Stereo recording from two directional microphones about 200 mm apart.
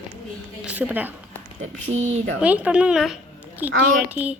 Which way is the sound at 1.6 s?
35° right (ahead or behind).